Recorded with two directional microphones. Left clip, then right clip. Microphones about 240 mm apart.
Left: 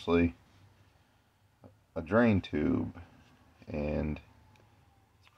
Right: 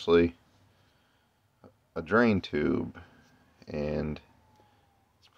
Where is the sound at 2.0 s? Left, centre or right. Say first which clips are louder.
Right 2 dB; centre.